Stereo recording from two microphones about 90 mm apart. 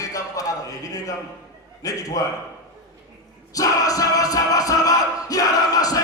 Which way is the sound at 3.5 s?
40° left (ahead or behind).